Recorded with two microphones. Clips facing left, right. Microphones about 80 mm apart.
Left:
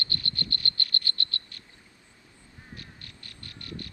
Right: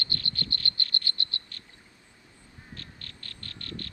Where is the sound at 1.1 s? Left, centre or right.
Right.